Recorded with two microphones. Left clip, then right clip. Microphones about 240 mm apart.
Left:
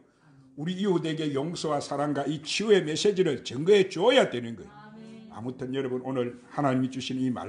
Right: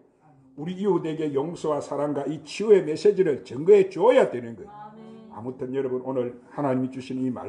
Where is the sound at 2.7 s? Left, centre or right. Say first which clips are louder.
Right 5 dB; left.